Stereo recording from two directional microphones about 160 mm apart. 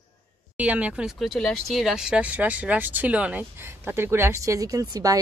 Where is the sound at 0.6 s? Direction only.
10° right (ahead or behind).